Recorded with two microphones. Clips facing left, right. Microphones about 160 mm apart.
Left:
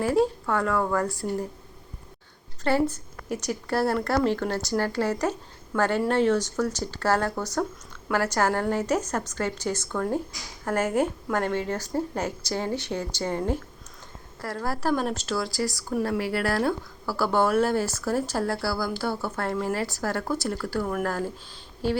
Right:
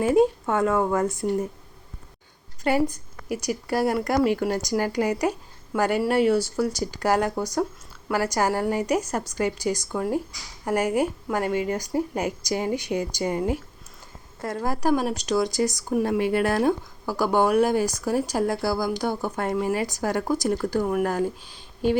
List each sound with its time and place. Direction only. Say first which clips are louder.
0.0 s a woman's voice: right 4 dB; 20° right (ahead or behind)
2.6 s speech: right 1 dB; 15° right (ahead or behind)